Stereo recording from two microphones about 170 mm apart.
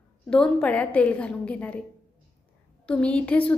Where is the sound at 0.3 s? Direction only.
5° left (ahead or behind).